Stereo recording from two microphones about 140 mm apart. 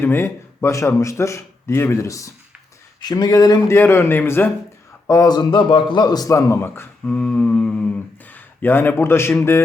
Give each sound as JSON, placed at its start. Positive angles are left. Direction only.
{"t": 0.0, "sound": "a man's voice", "side_deg": 15}
{"t": 7.0, "sound": "a man's voice", "side_deg": 10}